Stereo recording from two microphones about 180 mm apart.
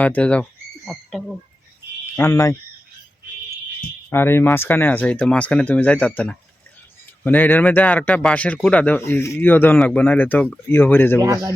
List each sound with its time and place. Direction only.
0.0 s speech: 5° left (ahead or behind)
2.1 s speech: 15° left (ahead or behind)
4.1 s speech: 10° left (ahead or behind)
11.2 s speech: 20° right (ahead or behind)